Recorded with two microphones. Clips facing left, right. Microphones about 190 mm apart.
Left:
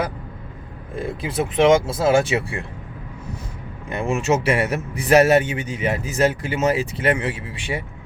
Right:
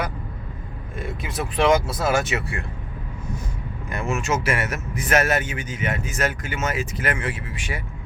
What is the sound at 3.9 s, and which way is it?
Speech, 30° left (ahead or behind).